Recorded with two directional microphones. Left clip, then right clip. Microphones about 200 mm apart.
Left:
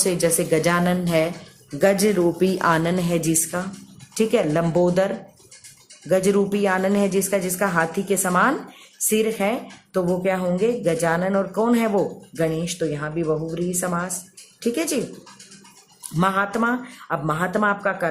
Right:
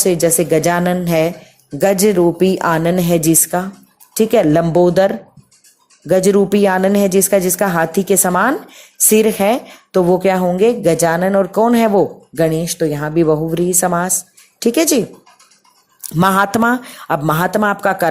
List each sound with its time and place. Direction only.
0.0 s speech: 30° right (ahead or behind)
16.2 s speech: 45° right (ahead or behind)